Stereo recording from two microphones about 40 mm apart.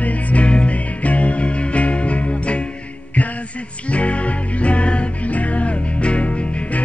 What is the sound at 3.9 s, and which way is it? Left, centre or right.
Music, left.